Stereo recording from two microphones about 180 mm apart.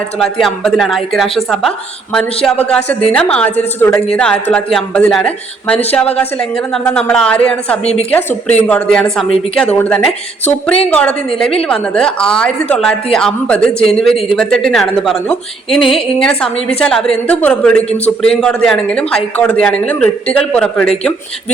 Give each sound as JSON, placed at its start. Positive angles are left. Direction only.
{"t": 0.2, "sound": "a woman's voice", "side_deg": 0}